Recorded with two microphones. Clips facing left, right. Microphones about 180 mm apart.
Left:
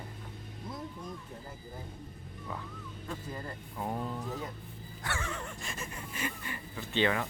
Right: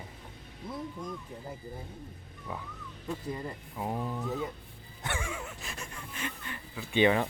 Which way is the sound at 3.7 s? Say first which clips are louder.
Right 1 dB; 10° right (ahead or behind).